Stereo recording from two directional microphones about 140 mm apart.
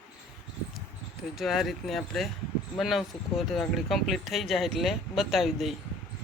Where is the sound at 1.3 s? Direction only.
Centre (ahead or behind).